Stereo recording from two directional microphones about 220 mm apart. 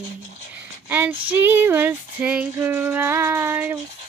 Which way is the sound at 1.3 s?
10° right (ahead or behind).